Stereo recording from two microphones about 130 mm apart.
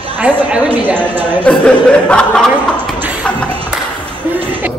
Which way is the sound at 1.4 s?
10° left (ahead or behind).